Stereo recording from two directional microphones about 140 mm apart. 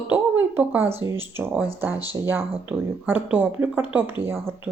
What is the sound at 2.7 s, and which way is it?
Speech, 10° right (ahead or behind).